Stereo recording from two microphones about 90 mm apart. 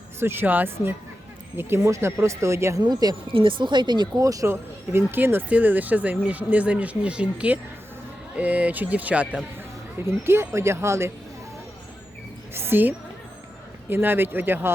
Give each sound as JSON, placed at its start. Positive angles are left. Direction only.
{"t": 0.2, "sound": "speech", "side_deg": -25}
{"t": 2.8, "sound": "speech", "side_deg": -50}
{"t": 3.3, "sound": "speech", "side_deg": -70}
{"t": 4.2, "sound": "speech", "side_deg": -40}
{"t": 4.9, "sound": "speech", "side_deg": -25}
{"t": 10.0, "sound": "speech", "side_deg": -30}
{"t": 12.5, "sound": "speech", "side_deg": -25}
{"t": 13.9, "sound": "speech", "side_deg": -25}